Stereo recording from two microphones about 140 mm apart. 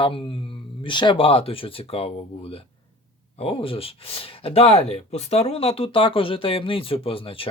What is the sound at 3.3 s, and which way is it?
Speech, 45° left (ahead or behind).